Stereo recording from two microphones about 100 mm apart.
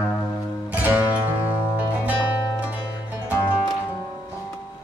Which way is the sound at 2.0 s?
15° right (ahead or behind).